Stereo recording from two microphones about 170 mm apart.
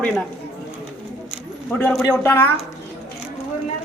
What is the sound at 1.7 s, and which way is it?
Speech, 10° left (ahead or behind).